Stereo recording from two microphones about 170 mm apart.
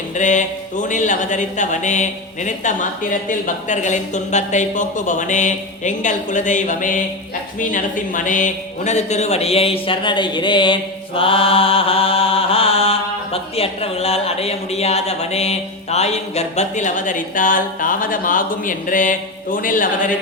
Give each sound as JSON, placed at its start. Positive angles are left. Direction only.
{"t": 0.2, "sound": "speech", "side_deg": 45}